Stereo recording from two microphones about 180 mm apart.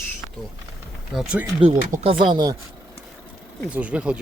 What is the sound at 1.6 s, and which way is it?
Speech, 35° right (ahead or behind).